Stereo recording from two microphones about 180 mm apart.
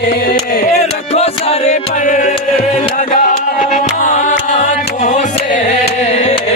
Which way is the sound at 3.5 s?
50° left (ahead or behind).